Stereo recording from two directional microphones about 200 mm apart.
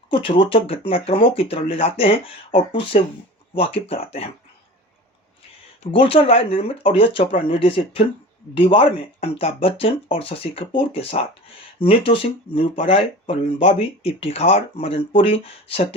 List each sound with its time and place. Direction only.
0.1 s speech: 25° left (ahead or behind)
5.8 s speech: 25° left (ahead or behind)